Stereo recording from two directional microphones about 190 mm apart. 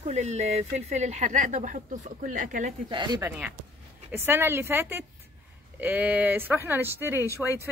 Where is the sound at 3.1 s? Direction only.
10° right (ahead or behind).